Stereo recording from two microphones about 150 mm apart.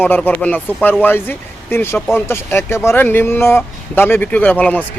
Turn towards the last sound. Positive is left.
turn(degrees=10)  # may be behind; listen again after turning